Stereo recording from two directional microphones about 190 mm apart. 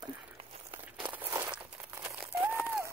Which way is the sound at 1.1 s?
10° right (ahead or behind).